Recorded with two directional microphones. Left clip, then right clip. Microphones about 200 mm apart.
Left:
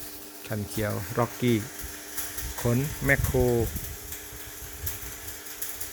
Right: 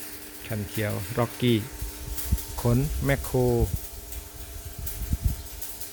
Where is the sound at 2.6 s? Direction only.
5° right (ahead or behind).